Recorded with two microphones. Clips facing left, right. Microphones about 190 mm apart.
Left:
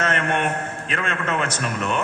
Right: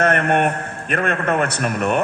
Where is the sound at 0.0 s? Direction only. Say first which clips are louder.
Right 6 dB; 55° right (ahead or behind).